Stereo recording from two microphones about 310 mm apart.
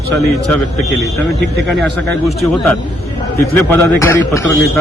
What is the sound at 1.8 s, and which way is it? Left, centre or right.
A man's voice, centre.